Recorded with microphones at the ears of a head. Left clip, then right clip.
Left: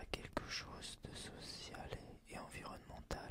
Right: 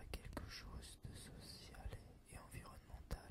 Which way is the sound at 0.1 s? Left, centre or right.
Left.